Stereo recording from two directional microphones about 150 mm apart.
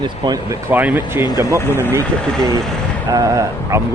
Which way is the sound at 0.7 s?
10° right (ahead or behind).